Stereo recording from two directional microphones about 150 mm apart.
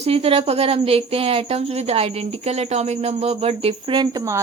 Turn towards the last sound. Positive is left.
turn(degrees=-20)  # may be behind; listen again after turning